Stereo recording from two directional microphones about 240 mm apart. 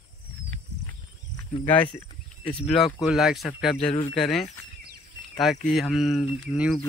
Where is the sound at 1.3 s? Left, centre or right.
Centre.